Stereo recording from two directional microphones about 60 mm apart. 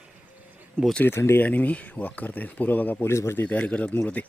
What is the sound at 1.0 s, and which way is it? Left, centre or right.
Speech, left.